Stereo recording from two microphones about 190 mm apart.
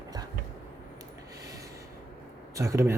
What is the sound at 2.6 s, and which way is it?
Speech, 15° right (ahead or behind).